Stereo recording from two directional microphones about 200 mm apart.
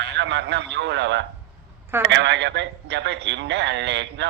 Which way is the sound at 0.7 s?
60° right (ahead or behind).